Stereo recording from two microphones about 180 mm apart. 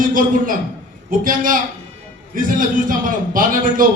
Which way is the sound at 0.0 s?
50° right (ahead or behind).